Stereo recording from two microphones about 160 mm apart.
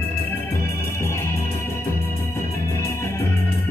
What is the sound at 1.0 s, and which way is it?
Organ, 15° left (ahead or behind).